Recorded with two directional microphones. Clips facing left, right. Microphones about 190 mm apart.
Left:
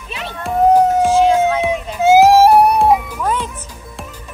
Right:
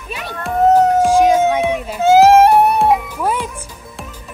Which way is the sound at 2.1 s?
Centre (ahead or behind).